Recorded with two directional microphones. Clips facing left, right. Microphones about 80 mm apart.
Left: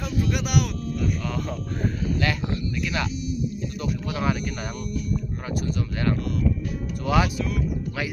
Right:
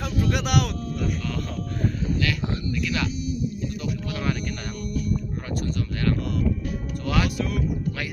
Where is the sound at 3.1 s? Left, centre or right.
Right.